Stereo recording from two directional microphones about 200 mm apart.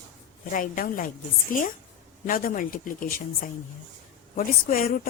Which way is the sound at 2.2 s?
45° left (ahead or behind).